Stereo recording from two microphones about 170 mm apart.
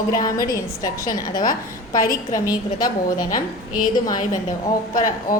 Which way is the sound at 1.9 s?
55° left (ahead or behind).